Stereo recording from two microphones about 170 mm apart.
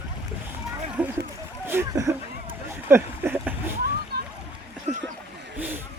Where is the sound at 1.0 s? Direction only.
10° right (ahead or behind).